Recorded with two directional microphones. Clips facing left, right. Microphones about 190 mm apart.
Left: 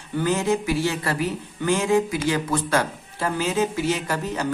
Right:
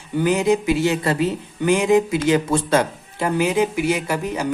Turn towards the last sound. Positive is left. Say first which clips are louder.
# right 3 dB
turn(degrees=-10)  # may be behind; listen again after turning